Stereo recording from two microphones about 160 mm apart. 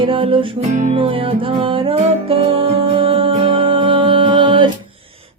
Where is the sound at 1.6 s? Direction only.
35° right (ahead or behind).